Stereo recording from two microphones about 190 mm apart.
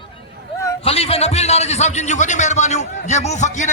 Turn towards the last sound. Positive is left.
turn(degrees=40)  # may be behind; listen again after turning